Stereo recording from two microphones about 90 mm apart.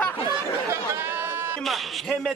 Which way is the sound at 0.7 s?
25° right (ahead or behind).